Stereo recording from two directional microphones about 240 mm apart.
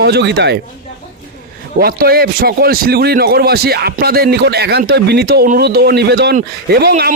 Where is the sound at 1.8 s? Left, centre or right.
Right.